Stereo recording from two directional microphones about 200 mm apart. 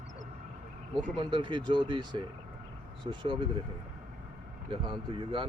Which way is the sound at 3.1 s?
25° right (ahead or behind).